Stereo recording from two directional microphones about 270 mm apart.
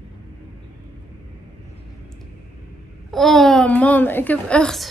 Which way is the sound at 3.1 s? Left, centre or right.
Centre.